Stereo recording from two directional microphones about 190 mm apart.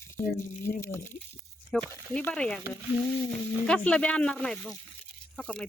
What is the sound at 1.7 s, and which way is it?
Speech, 5° left (ahead or behind).